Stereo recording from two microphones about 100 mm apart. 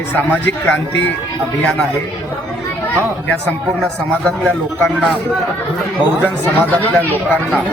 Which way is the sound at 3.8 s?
10° left (ahead or behind).